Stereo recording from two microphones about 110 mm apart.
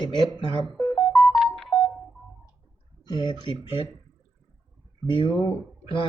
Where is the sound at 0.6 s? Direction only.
5° left (ahead or behind).